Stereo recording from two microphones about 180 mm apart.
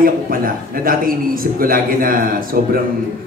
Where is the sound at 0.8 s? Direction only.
50° right (ahead or behind).